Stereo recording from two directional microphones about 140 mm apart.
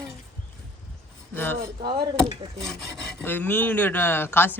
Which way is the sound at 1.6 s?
35° right (ahead or behind).